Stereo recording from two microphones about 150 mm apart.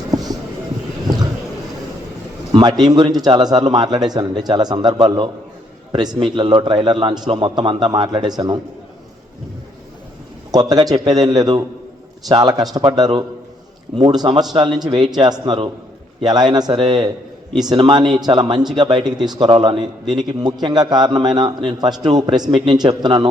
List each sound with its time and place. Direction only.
1.0 s a sound: 25° right (ahead or behind)
2.5 s a man's voice: 30° right (ahead or behind)
10.5 s a man's voice: 25° right (ahead or behind)